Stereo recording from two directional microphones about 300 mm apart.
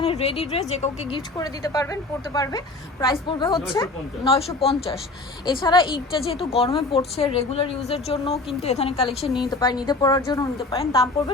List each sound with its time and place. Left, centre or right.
0.0 s a woman's voice: centre